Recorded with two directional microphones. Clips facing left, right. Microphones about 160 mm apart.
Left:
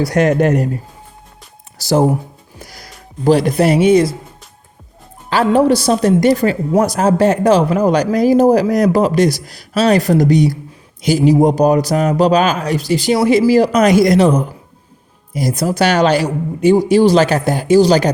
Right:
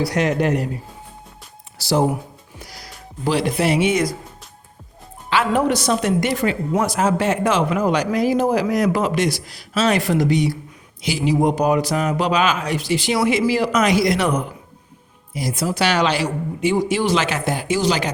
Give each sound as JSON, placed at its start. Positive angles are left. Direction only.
{"t": 0.0, "sound": "a woman's voice", "side_deg": 50}
{"t": 1.8, "sound": "a woman's voice", "side_deg": 45}
{"t": 5.3, "sound": "a woman's voice", "side_deg": 35}
{"t": 14.2, "sound": "a woman's voice", "side_deg": 30}
{"t": 15.3, "sound": "a woman's voice", "side_deg": 40}